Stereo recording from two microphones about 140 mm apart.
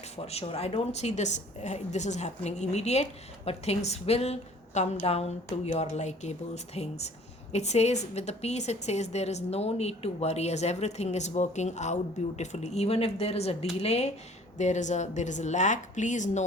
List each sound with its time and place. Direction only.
0.2 s a woman's voice: 45° left (ahead or behind); by 16.4 s 60° left (ahead or behind)